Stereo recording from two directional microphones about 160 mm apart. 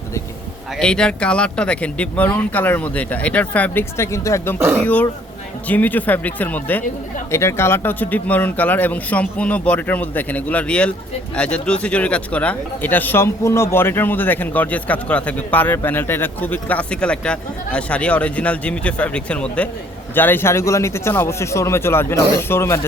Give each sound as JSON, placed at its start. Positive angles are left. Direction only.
{"t": 0.8, "sound": "speech", "side_deg": 5}